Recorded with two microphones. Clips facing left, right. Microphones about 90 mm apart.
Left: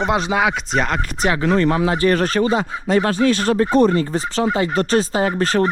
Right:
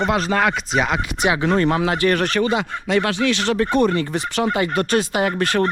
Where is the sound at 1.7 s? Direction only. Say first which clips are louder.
Left 2 dB; 35° left (ahead or behind).